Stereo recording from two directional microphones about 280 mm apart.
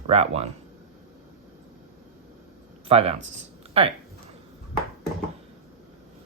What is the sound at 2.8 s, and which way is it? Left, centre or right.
Speech, right.